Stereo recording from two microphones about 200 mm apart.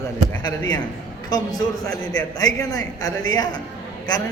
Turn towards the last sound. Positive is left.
turn(degrees=20)  # may be behind; listen again after turning